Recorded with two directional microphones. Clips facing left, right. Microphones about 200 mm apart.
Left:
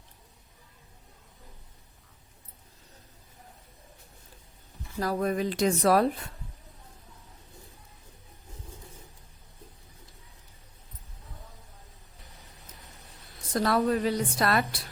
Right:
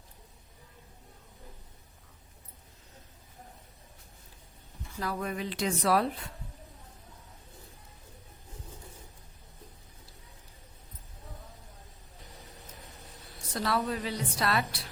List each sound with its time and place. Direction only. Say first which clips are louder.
4.9 s a woman's voice: left 6 dB; 40° left (ahead or behind)
13.5 s a woman's voice: left 6 dB; 45° left (ahead or behind)